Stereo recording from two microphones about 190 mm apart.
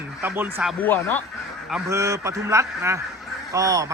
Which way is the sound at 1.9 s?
15° right (ahead or behind).